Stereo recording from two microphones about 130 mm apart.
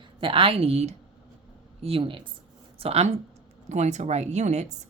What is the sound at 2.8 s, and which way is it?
Speech, 50° right (ahead or behind).